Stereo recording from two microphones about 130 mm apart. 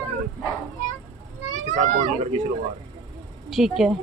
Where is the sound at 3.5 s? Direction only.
5° right (ahead or behind).